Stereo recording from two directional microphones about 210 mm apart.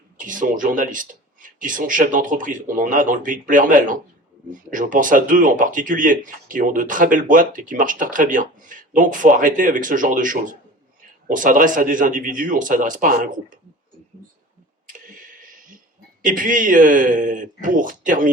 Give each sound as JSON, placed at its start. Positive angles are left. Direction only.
{"t": 0.2, "sound": "speech", "side_deg": -40}
{"t": 14.9, "sound": "a sound", "side_deg": -40}
{"t": 16.2, "sound": "speech", "side_deg": -40}